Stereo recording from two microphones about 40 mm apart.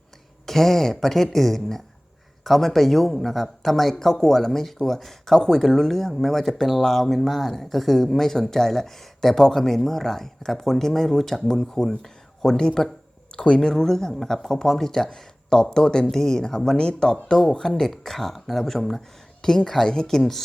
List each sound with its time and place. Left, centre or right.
0.4 s speech: centre; by 13.7 s left
13.7 s speech: centre